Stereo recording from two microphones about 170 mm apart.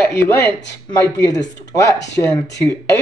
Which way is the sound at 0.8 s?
20° left (ahead or behind).